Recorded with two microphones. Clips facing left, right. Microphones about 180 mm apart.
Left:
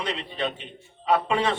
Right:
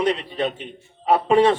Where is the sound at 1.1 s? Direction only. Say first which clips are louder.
Right 7 dB; 35° right (ahead or behind).